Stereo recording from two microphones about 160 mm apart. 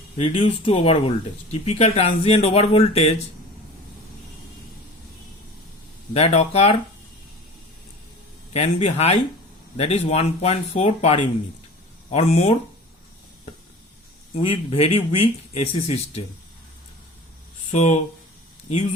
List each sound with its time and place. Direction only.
0.2 s speech: 35° left (ahead or behind)
6.1 s speech: 40° left (ahead or behind)
8.5 s speech: 40° left (ahead or behind)
14.3 s speech: 35° left (ahead or behind)
17.7 s speech: 45° left (ahead or behind)